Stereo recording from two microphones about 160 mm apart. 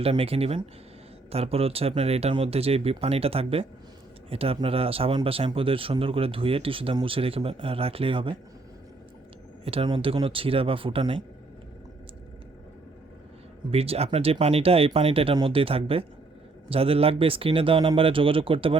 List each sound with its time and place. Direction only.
0.0 s speech: 35° right (ahead or behind)
9.6 s speech: 35° right (ahead or behind)
13.7 s speech: 40° right (ahead or behind)